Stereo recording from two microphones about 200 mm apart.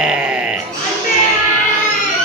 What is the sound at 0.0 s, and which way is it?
Grunt, 5° right (ahead or behind).